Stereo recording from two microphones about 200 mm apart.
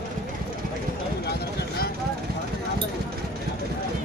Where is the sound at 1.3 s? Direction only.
55° left (ahead or behind).